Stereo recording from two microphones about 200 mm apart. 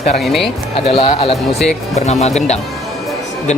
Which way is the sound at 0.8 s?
30° left (ahead or behind).